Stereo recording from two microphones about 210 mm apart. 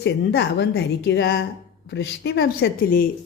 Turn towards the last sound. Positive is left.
turn(degrees=45)  # may be behind; listen again after turning